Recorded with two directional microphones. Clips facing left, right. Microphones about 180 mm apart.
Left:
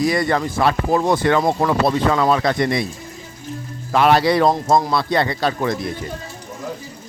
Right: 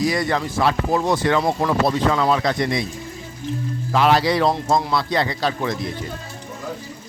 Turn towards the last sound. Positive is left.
turn(degrees=55)  # may be behind; listen again after turning